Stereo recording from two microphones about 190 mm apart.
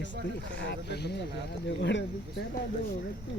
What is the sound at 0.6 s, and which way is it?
Speech, 60° left (ahead or behind).